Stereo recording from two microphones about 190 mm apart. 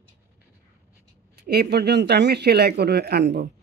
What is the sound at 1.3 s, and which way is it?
Speech, 55° right (ahead or behind).